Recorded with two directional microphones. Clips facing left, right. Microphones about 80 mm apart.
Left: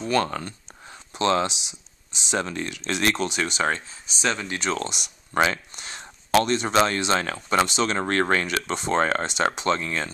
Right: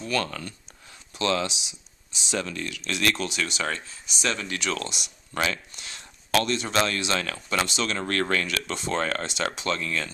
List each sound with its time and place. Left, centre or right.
0.0 s speech: left